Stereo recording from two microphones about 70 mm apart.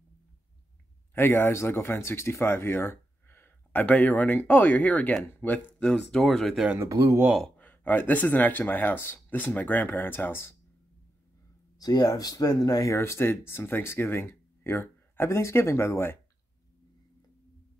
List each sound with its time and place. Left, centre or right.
1.1 s speech: left
5.9 s speech: centre
6.9 s speech: right
7.5 s speech: left
11.8 s speech: left
12.1 s speech: left
12.9 s speech: left